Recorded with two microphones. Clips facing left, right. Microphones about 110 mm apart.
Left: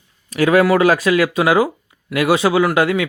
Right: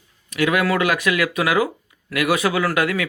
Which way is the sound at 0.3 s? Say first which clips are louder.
Left 6 dB; 35° left (ahead or behind).